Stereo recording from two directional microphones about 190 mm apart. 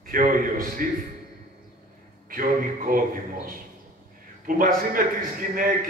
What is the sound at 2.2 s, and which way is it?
Speech, 45° right (ahead or behind).